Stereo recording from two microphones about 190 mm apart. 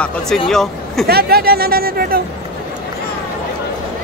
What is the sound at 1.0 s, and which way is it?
Speech, 55° right (ahead or behind).